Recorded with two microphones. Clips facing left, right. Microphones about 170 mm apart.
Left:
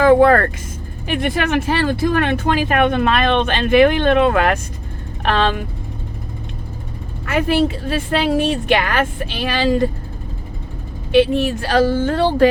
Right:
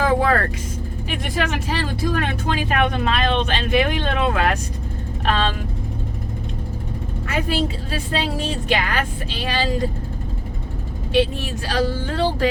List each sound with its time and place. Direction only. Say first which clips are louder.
0.0 s vehicle: left 8 dB; 60° left (ahead or behind)
1.0 s speech: left 6 dB; 60° left (ahead or behind)
7.3 s speech: left 6 dB; 65° left (ahead or behind)
11.1 s speech: left 6 dB; 65° left (ahead or behind)